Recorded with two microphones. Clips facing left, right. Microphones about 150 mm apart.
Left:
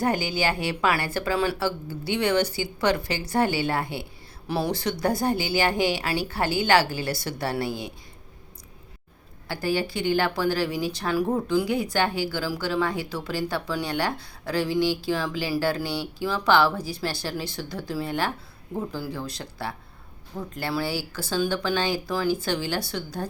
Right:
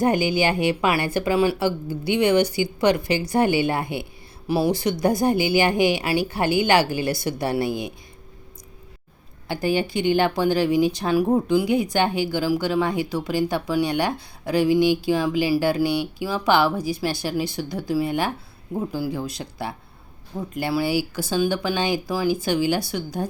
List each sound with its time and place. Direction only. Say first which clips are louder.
0.0 s speech: right 5 dB; 15° right (ahead or behind)
9.5 s speech: right 4 dB; 20° right (ahead or behind)